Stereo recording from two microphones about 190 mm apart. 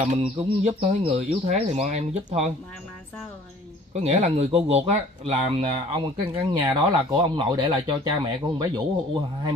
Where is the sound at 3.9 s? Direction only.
35° right (ahead or behind).